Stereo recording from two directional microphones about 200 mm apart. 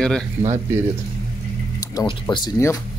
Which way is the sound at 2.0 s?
20° left (ahead or behind).